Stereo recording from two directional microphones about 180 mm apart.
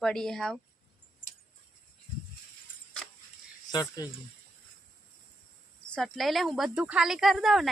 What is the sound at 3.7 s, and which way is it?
Speech, 20° left (ahead or behind).